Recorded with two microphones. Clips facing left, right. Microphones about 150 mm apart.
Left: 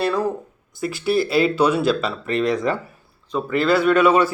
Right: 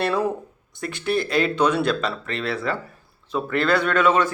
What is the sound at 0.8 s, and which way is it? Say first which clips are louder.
Speech: left 4 dB; 5° left (ahead or behind).